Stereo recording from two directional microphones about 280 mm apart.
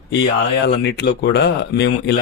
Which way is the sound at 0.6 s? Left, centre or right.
Left.